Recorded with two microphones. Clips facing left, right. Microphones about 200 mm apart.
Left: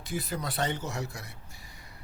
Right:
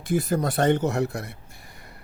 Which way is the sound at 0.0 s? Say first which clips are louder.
Right 10 dB; 50° right (ahead or behind).